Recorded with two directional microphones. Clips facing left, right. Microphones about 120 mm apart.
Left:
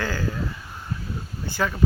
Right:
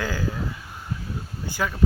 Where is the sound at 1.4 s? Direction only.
10° right (ahead or behind).